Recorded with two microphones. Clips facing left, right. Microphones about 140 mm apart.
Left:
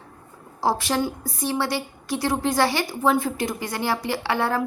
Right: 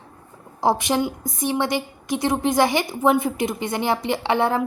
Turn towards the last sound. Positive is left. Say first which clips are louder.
# right 3 dB
turn(degrees=-20)  # may be behind; listen again after turning